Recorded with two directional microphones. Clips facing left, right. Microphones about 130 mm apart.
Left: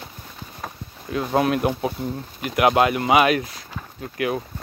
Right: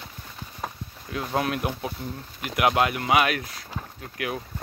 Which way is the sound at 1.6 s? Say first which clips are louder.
Left 7 dB; 40° left (ahead or behind).